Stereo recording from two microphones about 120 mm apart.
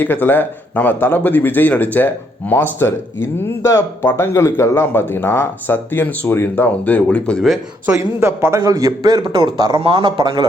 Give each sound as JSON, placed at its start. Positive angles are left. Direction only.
{"t": 0.0, "sound": "speech", "side_deg": 15}
{"t": 7.9, "sound": "a man's voice", "side_deg": -20}